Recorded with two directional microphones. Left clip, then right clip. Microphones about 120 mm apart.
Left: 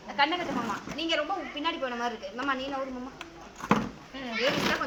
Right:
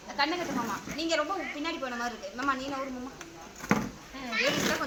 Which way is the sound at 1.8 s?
25° left (ahead or behind).